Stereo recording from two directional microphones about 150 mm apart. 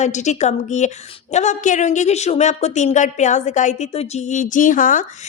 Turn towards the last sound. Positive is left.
turn(degrees=60)  # may be behind; listen again after turning